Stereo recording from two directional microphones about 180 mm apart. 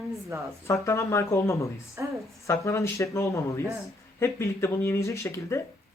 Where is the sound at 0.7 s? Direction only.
15° left (ahead or behind).